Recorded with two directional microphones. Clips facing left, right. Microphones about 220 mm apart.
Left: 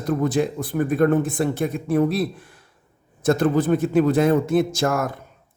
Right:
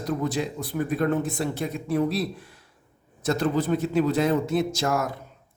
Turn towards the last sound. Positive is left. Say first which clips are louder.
# left 4 dB
turn(degrees=50)  # may be behind; listen again after turning